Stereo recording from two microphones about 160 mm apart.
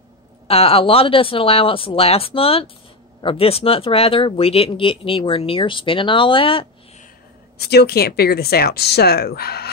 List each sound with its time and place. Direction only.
0.5 s speech: 35° left (ahead or behind)
7.5 s speech: 90° left